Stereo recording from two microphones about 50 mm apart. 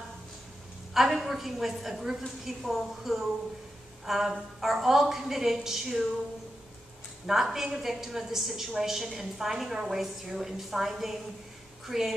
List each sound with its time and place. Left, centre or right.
0.9 s a woman's voice: centre
7.2 s a woman's voice: centre